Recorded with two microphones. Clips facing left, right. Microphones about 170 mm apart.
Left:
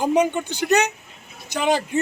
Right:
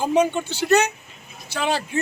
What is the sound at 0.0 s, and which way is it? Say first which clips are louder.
Speech: even; 15° left (ahead or behind).